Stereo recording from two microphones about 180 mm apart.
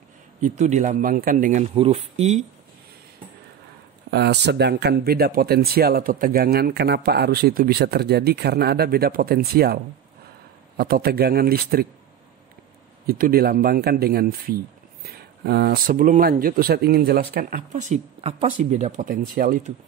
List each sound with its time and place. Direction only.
0.4 s speech: 40° right (ahead or behind)
4.1 s speech: 70° right (ahead or behind)
10.8 s speech: 60° right (ahead or behind)
13.0 s speech: 55° right (ahead or behind)